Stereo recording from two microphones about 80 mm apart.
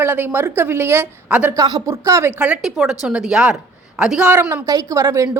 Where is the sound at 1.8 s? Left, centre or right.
Right.